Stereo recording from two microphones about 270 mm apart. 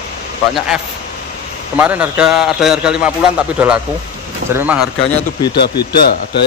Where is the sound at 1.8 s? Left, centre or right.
Centre.